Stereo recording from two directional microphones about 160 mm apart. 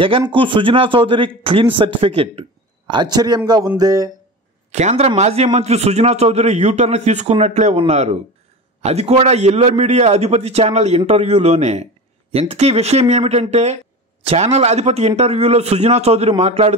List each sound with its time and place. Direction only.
0.3 s a man's voice: 30° right (ahead or behind)
4.6 s a man's voice: 45° right (ahead or behind)